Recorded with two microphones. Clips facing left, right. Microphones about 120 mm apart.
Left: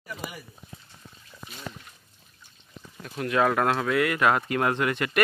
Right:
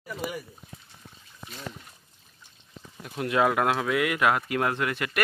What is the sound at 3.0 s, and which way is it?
Speech, 15° right (ahead or behind).